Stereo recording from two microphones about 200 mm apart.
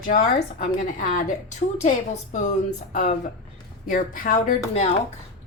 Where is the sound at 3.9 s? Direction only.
45° left (ahead or behind).